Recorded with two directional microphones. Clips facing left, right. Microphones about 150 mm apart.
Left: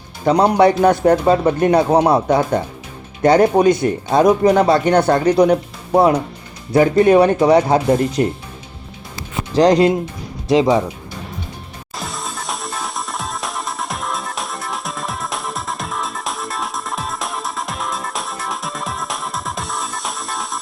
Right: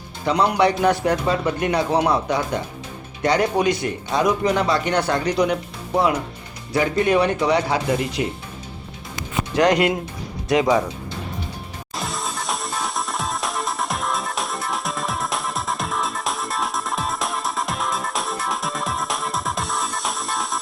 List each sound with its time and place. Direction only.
0.3 s speech: 40° left (ahead or behind)
9.6 s speech: 30° left (ahead or behind)
11.9 s music: centre (ahead or behind)